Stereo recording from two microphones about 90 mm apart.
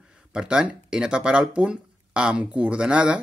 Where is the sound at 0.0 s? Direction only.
5° right (ahead or behind).